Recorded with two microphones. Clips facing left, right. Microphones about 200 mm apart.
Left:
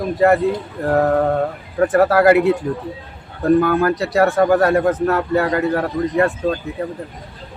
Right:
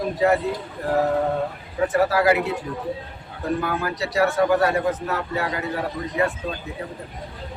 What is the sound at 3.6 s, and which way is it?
Speech, 55° left (ahead or behind).